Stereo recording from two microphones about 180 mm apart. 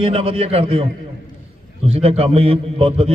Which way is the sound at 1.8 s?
35° right (ahead or behind).